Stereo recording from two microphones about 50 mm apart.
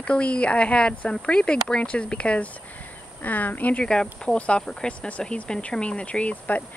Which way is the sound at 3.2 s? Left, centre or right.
Left.